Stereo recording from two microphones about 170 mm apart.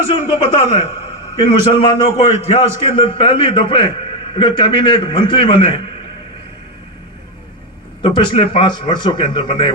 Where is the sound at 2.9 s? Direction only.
30° left (ahead or behind).